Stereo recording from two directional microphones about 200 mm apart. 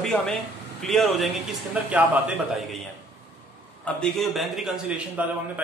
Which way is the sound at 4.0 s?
Centre (ahead or behind).